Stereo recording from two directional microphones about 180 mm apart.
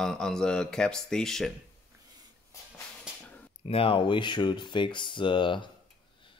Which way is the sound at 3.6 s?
30° left (ahead or behind).